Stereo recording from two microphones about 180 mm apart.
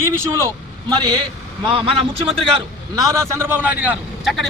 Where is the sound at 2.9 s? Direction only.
20° right (ahead or behind); by 4.4 s centre (ahead or behind).